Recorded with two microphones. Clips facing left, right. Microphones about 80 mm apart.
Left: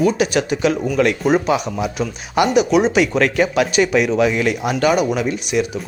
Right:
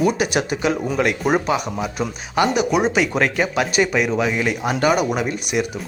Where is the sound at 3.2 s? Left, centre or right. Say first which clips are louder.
Left 3 dB; centre.